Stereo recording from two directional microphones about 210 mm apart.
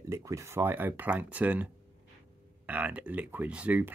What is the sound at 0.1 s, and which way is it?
Speech, 15° right (ahead or behind).